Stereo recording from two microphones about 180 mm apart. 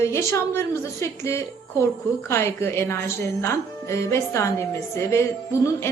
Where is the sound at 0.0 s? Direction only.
15° left (ahead or behind).